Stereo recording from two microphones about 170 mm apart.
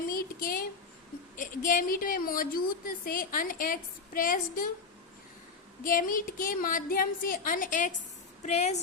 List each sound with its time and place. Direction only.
0.1 s a sound: 60° left (ahead or behind)
1.4 s a woman's voice: 50° left (ahead or behind)
5.8 s a woman's voice: 55° left (ahead or behind)